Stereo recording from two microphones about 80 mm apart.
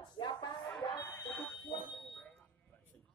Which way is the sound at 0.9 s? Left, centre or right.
Left.